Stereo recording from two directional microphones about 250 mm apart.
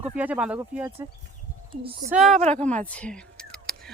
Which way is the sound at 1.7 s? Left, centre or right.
Right.